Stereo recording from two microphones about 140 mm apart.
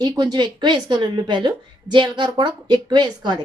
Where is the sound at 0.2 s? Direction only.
30° right (ahead or behind).